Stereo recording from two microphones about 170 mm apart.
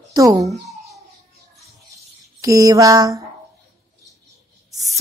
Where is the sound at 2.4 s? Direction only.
20° right (ahead or behind).